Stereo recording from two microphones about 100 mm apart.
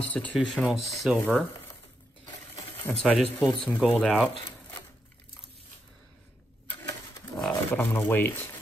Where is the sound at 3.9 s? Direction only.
10° left (ahead or behind).